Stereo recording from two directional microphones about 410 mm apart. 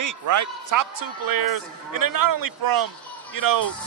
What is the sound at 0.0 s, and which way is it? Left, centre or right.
Speech, right.